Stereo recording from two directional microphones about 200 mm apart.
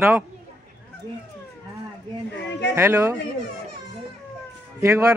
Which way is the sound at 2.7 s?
15° right (ahead or behind).